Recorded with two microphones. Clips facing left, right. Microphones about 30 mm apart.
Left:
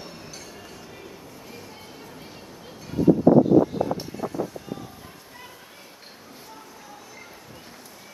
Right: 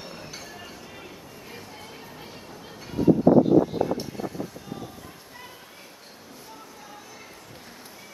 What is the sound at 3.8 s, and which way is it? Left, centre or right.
Vehicle, centre.